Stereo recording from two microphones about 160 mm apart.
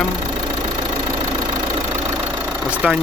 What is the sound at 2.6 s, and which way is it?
Speech, 10° right (ahead or behind).